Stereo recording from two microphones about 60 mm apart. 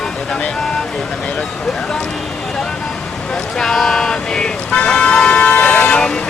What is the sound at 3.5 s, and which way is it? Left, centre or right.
Vehicle, centre.